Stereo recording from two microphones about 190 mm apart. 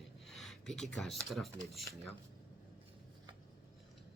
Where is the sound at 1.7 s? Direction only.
Centre (ahead or behind).